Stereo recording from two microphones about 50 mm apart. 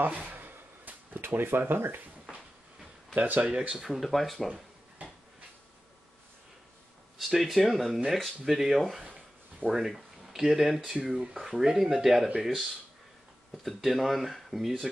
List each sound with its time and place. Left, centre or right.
0.3 s a sound: right
1.2 s speech: right
3.2 s speech: right
3.7 s speech: centre
7.2 s speech: centre
13.7 s speech: centre